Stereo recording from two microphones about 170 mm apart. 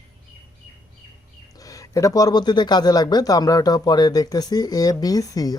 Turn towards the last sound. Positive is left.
turn(degrees=20)  # may be behind; listen again after turning